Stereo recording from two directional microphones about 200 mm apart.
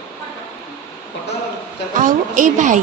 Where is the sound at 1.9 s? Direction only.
40° right (ahead or behind).